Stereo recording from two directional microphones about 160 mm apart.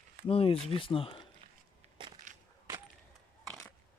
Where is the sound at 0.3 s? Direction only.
35° left (ahead or behind).